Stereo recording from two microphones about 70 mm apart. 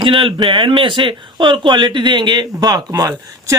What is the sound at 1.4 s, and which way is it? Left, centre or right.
Speech, right.